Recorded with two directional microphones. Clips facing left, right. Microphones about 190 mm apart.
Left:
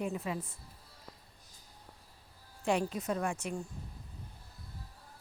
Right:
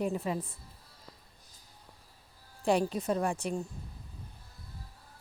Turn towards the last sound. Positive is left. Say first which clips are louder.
# right 4 dB
turn(degrees=-35)  # may be behind; listen again after turning